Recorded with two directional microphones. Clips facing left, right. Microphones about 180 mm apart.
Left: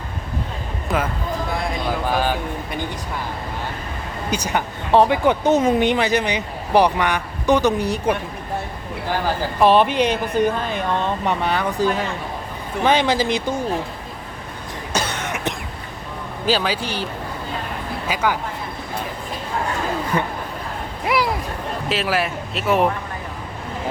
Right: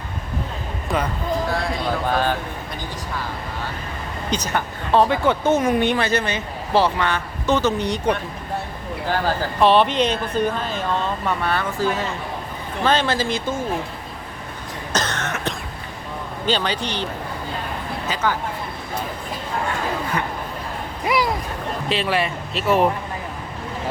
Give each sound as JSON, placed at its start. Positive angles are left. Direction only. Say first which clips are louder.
{"t": 0.9, "sound": "speech", "louder": "left 1 dB", "side_deg": 0}
{"t": 2.0, "sound": "speech", "louder": "even", "side_deg": 10}
{"t": 4.3, "sound": "speech", "louder": "left 1 dB", "side_deg": 10}
{"t": 9.6, "sound": "speech", "louder": "left 1 dB", "side_deg": 10}
{"t": 14.9, "sound": "cough", "louder": "even", "side_deg": 10}
{"t": 16.5, "sound": "speech", "louder": "left 2 dB", "side_deg": 5}
{"t": 18.1, "sound": "speech", "louder": "left 2 dB", "side_deg": 10}
{"t": 21.0, "sound": "a sound", "louder": "even", "side_deg": 0}
{"t": 21.8, "sound": "speech", "louder": "even", "side_deg": 0}